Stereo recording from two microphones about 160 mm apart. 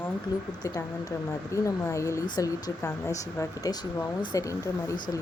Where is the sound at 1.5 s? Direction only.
20° left (ahead or behind).